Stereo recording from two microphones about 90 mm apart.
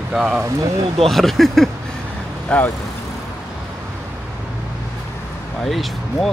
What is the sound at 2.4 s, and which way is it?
Speech, 20° left (ahead or behind).